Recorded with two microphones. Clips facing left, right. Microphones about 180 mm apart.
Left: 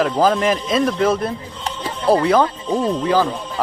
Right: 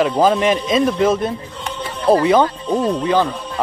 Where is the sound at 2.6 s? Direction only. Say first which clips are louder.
Right 1 dB; 20° right (ahead or behind).